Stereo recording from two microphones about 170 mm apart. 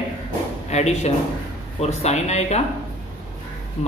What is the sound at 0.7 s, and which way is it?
Speech, 40° left (ahead or behind).